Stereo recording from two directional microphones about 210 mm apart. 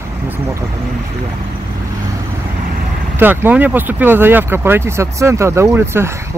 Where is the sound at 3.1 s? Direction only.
10° right (ahead or behind).